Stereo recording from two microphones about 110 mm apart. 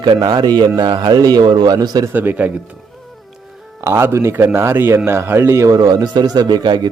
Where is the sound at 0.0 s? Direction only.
45° right (ahead or behind).